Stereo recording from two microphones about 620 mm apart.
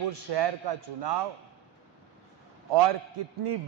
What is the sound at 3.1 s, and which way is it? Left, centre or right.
Speech, right.